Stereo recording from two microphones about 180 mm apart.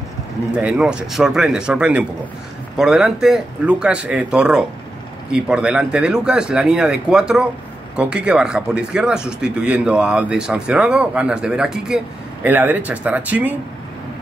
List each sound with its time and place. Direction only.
0.6 s speech: 5° right (ahead or behind)